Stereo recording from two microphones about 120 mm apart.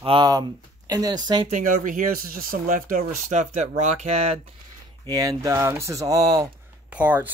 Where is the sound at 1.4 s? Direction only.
90° right.